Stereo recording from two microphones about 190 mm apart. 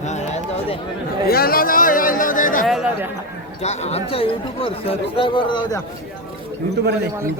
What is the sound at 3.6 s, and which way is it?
Speech, 35° left (ahead or behind).